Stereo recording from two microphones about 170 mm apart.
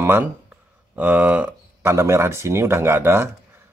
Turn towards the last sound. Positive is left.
turn(degrees=-15)  # may be behind; listen again after turning